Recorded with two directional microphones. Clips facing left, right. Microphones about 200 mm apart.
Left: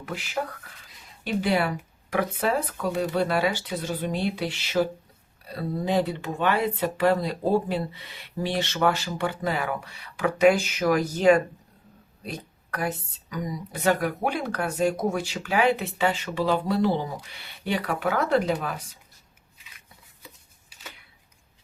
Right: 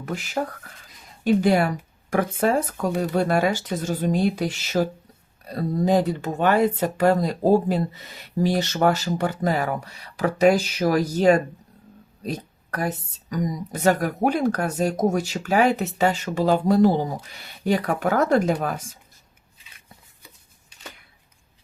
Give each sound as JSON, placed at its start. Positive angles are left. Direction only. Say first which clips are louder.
{"t": 0.0, "sound": "speech", "louder": "right 4 dB", "side_deg": -45}